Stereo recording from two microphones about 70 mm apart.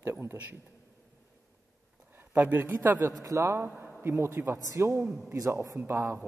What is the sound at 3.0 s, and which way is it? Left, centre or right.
A man's voice, right.